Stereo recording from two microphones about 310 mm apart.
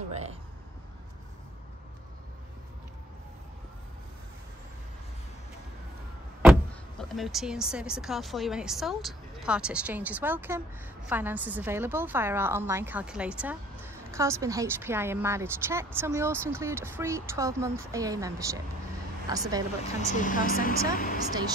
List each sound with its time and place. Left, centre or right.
0.1 s a sound: right
7.0 s a woman's voice: centre
20.2 s a woman's voice: left